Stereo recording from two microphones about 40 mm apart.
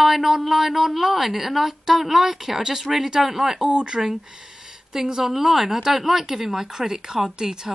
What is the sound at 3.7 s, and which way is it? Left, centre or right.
A woman's voice, right.